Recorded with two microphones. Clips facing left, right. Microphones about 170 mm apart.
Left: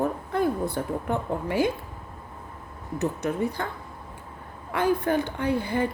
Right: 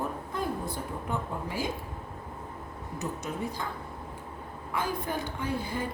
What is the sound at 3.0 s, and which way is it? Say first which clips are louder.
Speech: left 8 dB; 65° left (ahead or behind).